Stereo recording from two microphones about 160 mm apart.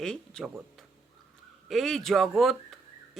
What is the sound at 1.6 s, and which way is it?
Speech, centre (ahead or behind).